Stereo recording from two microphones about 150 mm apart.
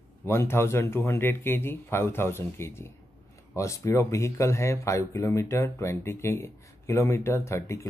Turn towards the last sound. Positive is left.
turn(degrees=20)  # may be behind; listen again after turning